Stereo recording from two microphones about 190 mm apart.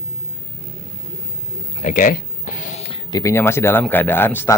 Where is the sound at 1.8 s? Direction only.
45° left (ahead or behind).